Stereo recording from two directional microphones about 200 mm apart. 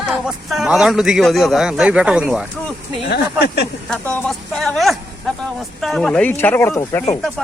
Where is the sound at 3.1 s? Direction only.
55° left (ahead or behind).